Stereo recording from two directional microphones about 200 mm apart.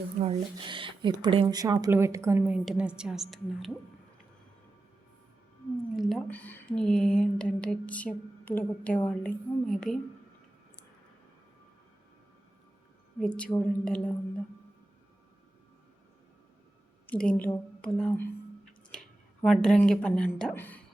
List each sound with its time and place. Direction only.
0.2 s a woman's voice: 25° right (ahead or behind); by 3.7 s centre (ahead or behind)
6.0 s speech: centre (ahead or behind)
13.1 s speech: 5° left (ahead or behind)
17.1 s a woman's voice: 5° left (ahead or behind)